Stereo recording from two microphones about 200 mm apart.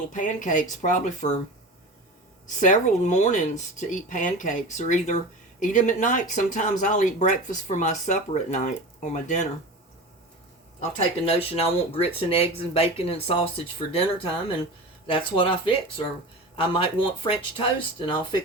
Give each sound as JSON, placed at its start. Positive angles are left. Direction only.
{"t": 0.1, "sound": "speech", "side_deg": 40}
{"t": 2.6, "sound": "speech", "side_deg": 40}
{"t": 11.3, "sound": "speech", "side_deg": 30}